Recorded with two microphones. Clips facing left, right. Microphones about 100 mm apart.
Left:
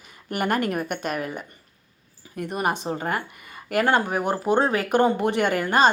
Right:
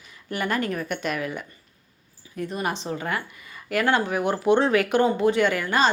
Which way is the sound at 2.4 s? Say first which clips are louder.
Left 2 dB; 55° left (ahead or behind).